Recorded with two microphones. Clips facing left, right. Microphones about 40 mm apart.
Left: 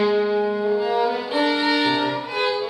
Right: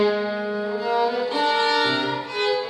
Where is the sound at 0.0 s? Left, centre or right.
Centre.